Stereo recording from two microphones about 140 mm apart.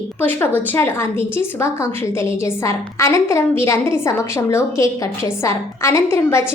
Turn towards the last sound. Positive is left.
turn(degrees=20)  # may be behind; listen again after turning